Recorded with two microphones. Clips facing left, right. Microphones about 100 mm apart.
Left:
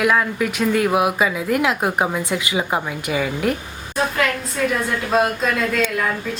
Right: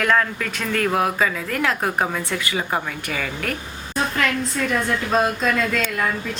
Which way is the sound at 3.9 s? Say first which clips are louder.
Left 2 dB; 5° left (ahead or behind).